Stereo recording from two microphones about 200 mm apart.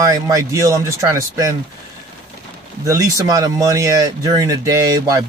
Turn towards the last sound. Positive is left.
turn(degrees=-15)  # may be behind; listen again after turning